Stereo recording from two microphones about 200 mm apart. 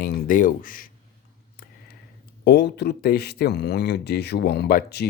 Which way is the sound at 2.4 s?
55° left (ahead or behind).